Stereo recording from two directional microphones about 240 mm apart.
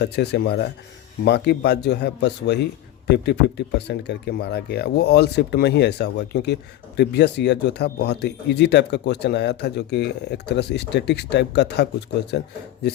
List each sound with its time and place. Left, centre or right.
0.0 s speech: left
3.8 s speech: left